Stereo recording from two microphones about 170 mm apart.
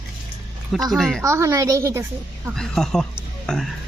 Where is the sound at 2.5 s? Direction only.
5° left (ahead or behind).